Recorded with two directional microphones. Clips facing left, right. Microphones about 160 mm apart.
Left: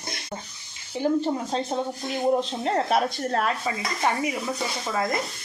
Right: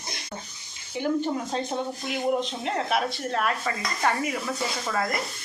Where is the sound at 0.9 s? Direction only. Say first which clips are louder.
Left 2 dB; 30° left (ahead or behind).